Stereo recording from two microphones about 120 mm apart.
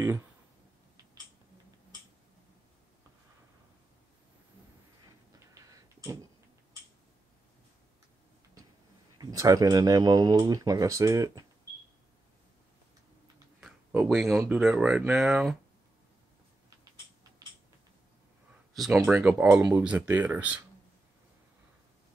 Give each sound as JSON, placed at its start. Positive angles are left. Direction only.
{"t": 5.4, "sound": "a sound", "side_deg": -30}
{"t": 9.2, "sound": "speech", "side_deg": -30}
{"t": 13.6, "sound": "a sound", "side_deg": -5}
{"t": 14.5, "sound": "speech", "side_deg": -5}
{"t": 18.7, "sound": "speech", "side_deg": 0}
{"t": 19.1, "sound": "speech", "side_deg": -20}